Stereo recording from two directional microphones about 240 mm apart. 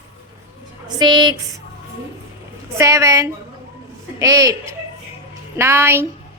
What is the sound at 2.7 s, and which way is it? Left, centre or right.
A woman's voice, centre.